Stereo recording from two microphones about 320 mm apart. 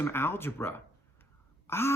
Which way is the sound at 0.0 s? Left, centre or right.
Centre.